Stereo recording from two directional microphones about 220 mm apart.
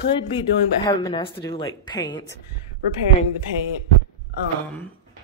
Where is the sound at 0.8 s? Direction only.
20° left (ahead or behind).